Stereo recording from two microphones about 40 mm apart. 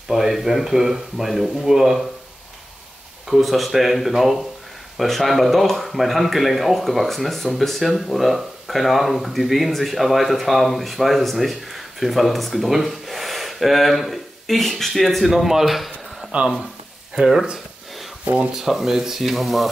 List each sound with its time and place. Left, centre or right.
0.1 s speech: centre
3.3 s speech: centre
18.2 s speech: right
18.5 s speech: centre